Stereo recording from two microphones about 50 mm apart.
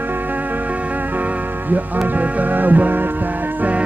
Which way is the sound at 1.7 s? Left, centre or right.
Right.